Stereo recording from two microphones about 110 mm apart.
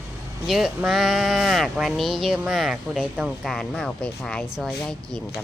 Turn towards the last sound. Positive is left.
turn(degrees=0)  # may be behind; listen again after turning